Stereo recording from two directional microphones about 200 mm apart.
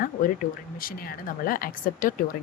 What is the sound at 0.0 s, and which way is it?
A woman's voice, 45° left (ahead or behind).